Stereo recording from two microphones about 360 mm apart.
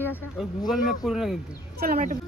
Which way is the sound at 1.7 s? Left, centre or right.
Right.